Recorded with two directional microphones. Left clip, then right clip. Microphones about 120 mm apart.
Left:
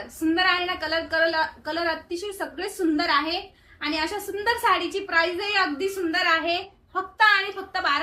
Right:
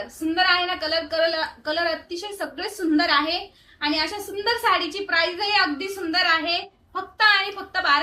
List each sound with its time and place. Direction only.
0.3 s a woman's voice: 25° left (ahead or behind)